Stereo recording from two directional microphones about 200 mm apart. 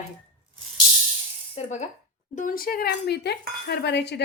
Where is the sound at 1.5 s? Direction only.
35° left (ahead or behind).